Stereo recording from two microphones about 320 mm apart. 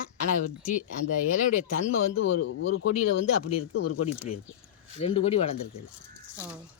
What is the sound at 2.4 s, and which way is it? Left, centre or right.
Speech, left.